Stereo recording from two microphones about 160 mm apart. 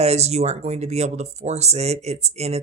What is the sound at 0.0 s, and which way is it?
Speech, 40° right (ahead or behind).